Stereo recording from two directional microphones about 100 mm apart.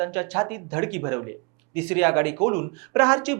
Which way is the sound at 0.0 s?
15° right (ahead or behind).